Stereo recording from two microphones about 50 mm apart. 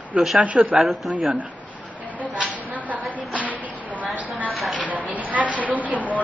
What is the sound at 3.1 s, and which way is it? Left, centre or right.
Music, right.